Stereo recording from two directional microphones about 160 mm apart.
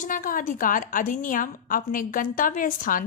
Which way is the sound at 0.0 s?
55° left (ahead or behind).